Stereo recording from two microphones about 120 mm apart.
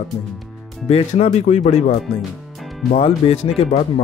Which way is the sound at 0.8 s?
60° left (ahead or behind).